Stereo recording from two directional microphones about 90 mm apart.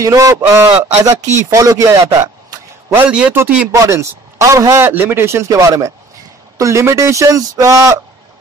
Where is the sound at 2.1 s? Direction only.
40° right (ahead or behind).